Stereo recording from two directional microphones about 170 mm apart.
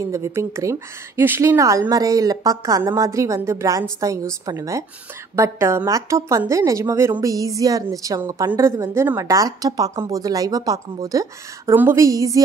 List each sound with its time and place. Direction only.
0.0 s a woman's voice: 15° right (ahead or behind)